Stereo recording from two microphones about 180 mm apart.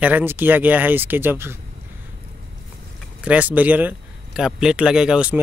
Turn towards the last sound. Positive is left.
turn(degrees=-5)  # may be behind; listen again after turning